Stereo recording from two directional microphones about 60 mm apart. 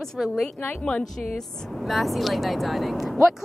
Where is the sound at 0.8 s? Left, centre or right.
Centre.